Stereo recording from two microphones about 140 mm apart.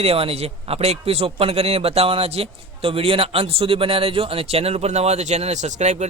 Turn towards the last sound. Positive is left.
turn(degrees=-55)  # may be behind; listen again after turning